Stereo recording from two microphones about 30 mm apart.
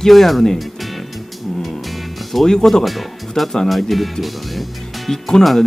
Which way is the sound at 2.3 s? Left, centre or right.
Centre.